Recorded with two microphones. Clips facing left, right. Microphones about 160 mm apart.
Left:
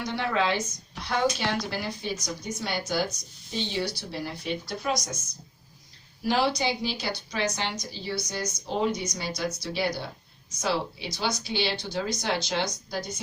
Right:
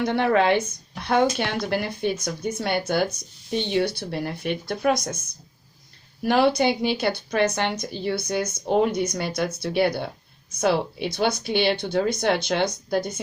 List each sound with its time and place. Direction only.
0.0 s a woman's voice: 55° right (ahead or behind)
6.2 s a woman's voice: 55° right (ahead or behind)